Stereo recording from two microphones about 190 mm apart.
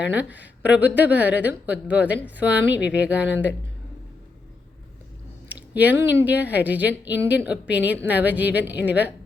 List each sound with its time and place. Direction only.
0.0 s a woman's voice: 5° right (ahead or behind)
5.5 s a sound: 10° right (ahead or behind)
6.2 s a woman's voice: 10° right (ahead or behind)